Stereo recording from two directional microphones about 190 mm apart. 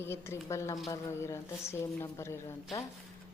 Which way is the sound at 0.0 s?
15° left (ahead or behind).